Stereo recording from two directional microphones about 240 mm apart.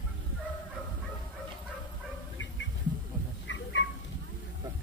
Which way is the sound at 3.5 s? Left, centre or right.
Left.